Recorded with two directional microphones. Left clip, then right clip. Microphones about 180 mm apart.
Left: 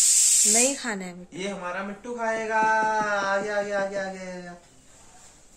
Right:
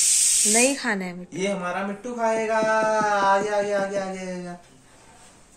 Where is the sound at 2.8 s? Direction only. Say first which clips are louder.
Right 3 dB; 40° right (ahead or behind).